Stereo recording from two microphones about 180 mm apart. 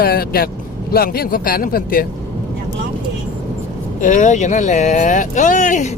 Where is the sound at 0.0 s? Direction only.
55° left (ahead or behind).